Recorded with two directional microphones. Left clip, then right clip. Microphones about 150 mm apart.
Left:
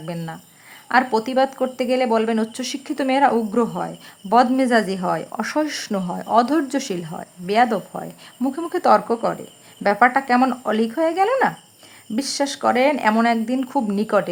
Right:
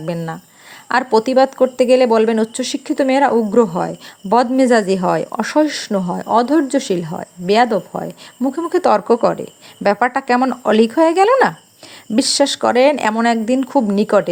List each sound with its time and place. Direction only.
0.9 s speech: 30° right (ahead or behind)